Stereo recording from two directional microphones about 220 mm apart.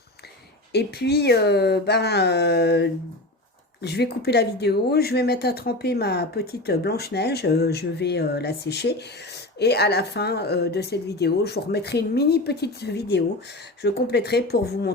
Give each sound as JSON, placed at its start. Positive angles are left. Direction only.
{"t": 0.7, "sound": "speech", "side_deg": 45}